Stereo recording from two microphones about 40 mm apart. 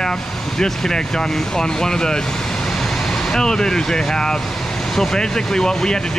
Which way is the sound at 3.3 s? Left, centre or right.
Centre.